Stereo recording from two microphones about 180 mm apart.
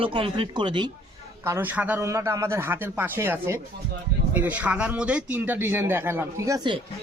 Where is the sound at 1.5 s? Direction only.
10° right (ahead or behind).